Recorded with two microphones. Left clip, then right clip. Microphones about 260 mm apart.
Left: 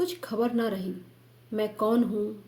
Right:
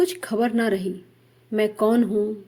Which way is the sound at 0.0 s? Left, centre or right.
Right.